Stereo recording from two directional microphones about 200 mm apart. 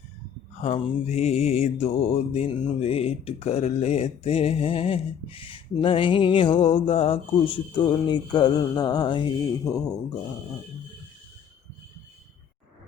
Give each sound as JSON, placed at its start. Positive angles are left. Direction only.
{"t": 0.6, "sound": "mantra", "side_deg": 30}